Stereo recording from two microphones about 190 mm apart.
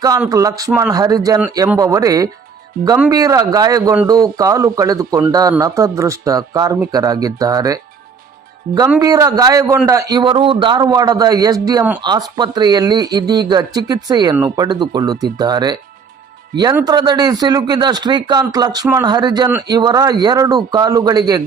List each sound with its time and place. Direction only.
0.3 s a man's voice: 20° right (ahead or behind)
9.0 s a man's voice: 20° right (ahead or behind)